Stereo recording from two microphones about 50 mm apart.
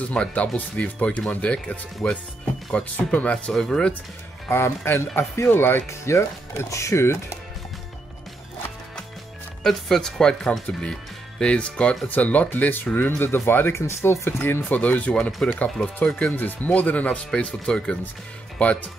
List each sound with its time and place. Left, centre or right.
0.1 s speech: left
2.0 s speech: centre
2.7 s speech: left
3.5 s speech: centre
4.5 s speech: left
5.9 s speech: left
9.6 s speech: centre
12.1 s speech: left
13.7 s speech: left
14.8 s speech: left
16.3 s speech: left